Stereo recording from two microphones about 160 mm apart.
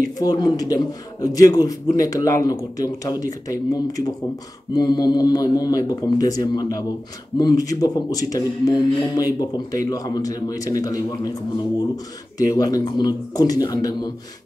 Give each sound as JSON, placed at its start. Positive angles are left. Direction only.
{"t": 0.2, "sound": "speech", "side_deg": 25}
{"t": 12.4, "sound": "speech", "side_deg": 25}